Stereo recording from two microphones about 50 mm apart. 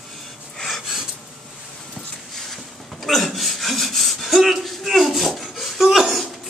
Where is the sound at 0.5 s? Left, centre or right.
Centre.